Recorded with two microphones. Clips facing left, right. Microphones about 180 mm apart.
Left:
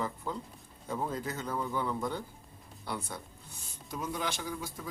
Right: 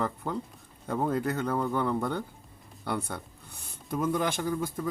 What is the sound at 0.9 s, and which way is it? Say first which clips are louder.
Speech: right 7 dB; 60° right (ahead or behind).